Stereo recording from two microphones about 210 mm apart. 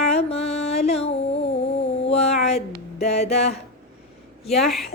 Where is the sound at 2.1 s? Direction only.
30° left (ahead or behind).